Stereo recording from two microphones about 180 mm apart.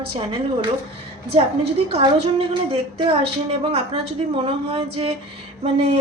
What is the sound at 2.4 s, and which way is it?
Speech, 30° right (ahead or behind).